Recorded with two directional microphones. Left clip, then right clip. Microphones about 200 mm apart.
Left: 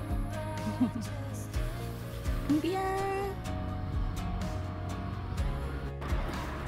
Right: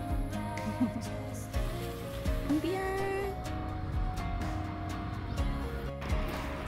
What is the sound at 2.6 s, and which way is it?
Music, 15° left (ahead or behind).